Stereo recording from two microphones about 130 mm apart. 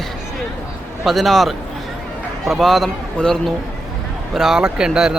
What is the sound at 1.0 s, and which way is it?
A man's voice, centre (ahead or behind).